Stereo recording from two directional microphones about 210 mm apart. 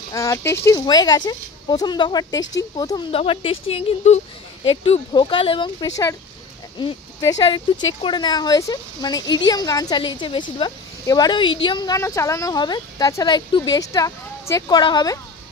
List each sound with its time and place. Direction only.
0.1 s speech: 15° left (ahead or behind)
3.1 s a woman's voice: 25° left (ahead or behind)